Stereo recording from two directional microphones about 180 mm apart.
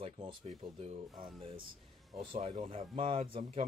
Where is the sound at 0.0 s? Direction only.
30° right (ahead or behind).